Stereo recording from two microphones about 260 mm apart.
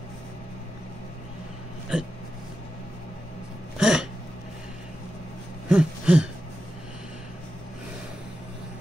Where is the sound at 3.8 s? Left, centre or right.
Centre.